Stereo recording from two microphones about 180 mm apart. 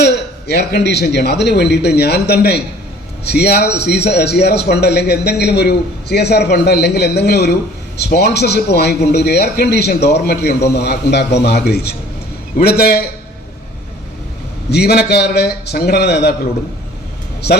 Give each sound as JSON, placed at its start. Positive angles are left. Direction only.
{"t": 0.0, "sound": "a man's voice", "side_deg": 65}
{"t": 14.7, "sound": "a man's voice", "side_deg": 65}